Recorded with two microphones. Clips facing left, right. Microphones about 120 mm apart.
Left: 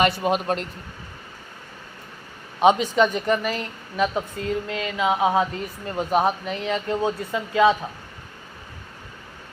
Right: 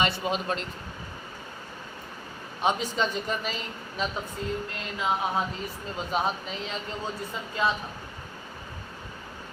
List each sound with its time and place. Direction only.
0.0 s a man's voice: 55° left (ahead or behind)
2.6 s speech: 75° left (ahead or behind)